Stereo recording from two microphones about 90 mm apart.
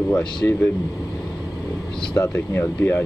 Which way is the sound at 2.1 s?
25° left (ahead or behind).